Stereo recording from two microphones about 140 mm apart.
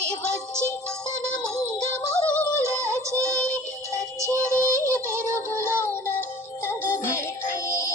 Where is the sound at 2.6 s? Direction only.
20° right (ahead or behind).